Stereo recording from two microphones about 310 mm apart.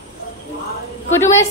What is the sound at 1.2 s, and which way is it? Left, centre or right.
Speech, centre.